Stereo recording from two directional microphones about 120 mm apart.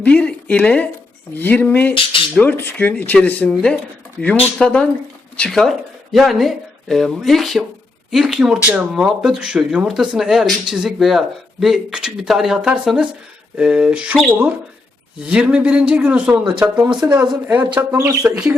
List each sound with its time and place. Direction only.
0.0 s a man's voice: 10° left (ahead or behind); by 14.2 s 10° right (ahead or behind)
15.3 s a man's voice: 10° right (ahead or behind)